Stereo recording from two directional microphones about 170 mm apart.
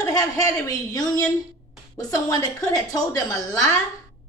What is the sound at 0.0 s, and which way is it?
Speech, 20° left (ahead or behind).